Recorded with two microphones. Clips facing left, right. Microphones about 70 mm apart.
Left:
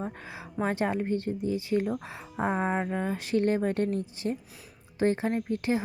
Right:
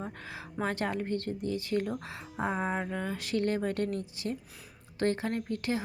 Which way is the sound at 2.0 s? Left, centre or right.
Left.